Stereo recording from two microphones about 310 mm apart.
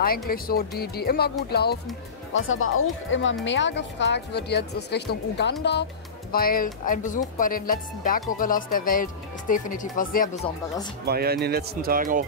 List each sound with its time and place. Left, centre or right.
0.3 s speech: left
11.1 s speech: right